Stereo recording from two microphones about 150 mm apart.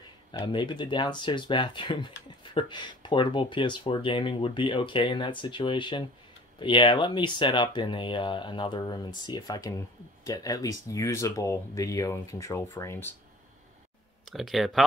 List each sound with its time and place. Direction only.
0.5 s speech: 30° left (ahead or behind); by 13.1 s 15° left (ahead or behind)
14.3 s speech: centre (ahead or behind)